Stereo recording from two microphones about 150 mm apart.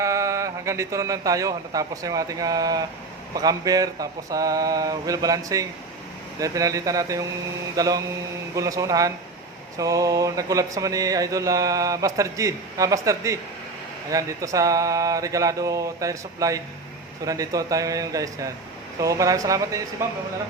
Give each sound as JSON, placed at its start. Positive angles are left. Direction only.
{"t": 0.0, "sound": "a man's voice", "side_deg": -20}
{"t": 3.3, "sound": "a sound", "side_deg": -25}
{"t": 20.0, "sound": "speech", "side_deg": -20}